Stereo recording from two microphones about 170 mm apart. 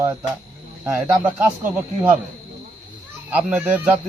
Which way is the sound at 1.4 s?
10° right (ahead or behind).